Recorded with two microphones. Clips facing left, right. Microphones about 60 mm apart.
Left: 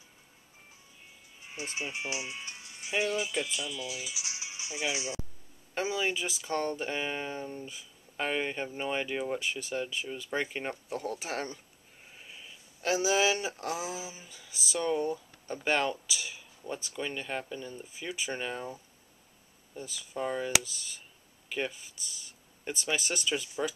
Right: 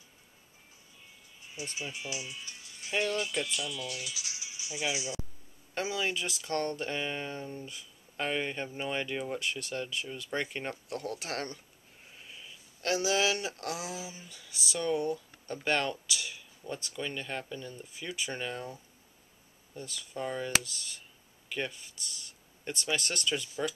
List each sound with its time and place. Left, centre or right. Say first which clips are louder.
1.9 s music: left 3 dB; left
2.9 s speech: left 1 dB; centre
4.1 s music: left 2 dB; left
5.8 s speech: left 2 dB; centre